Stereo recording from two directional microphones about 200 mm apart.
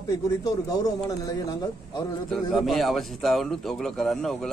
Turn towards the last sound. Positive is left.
turn(degrees=0)  # may be behind; listen again after turning